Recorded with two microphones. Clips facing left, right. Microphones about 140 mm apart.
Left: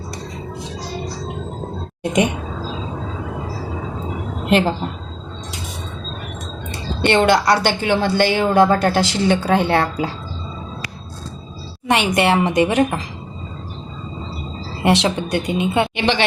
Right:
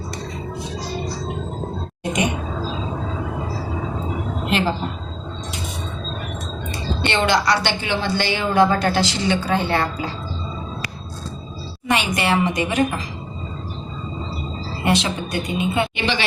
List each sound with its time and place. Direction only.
4.4 s a woman's voice: 55° left (ahead or behind)
6.7 s a woman's voice: 55° left (ahead or behind)
11.9 s a woman's voice: 65° left (ahead or behind)
14.8 s a woman's voice: 70° left (ahead or behind)